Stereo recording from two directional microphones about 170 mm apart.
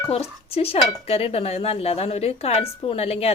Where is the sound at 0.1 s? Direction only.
35° left (ahead or behind).